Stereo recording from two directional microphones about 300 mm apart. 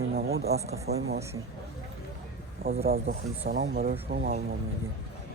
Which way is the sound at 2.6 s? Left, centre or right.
Right.